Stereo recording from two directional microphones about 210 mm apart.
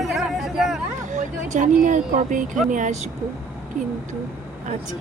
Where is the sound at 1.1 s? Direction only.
35° right (ahead or behind).